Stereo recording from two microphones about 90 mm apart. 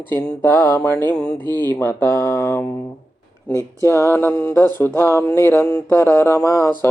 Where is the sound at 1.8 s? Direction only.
25° left (ahead or behind).